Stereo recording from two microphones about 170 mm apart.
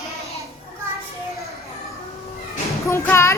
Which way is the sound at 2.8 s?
15° left (ahead or behind).